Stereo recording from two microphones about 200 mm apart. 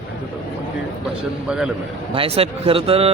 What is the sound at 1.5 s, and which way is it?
Speech, 5° right (ahead or behind).